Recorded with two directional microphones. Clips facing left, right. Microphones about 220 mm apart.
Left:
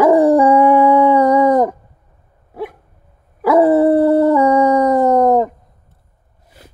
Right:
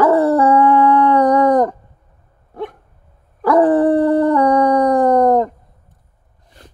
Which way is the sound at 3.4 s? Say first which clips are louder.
Left 1 dB; 10° left (ahead or behind).